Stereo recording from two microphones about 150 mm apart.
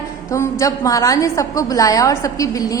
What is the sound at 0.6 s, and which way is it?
A woman's voice, 20° left (ahead or behind).